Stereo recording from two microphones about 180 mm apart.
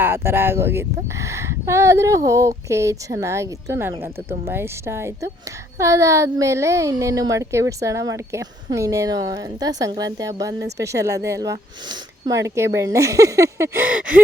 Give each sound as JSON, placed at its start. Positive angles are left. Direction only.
{"t": 0.0, "sound": "a child's voice", "side_deg": -15}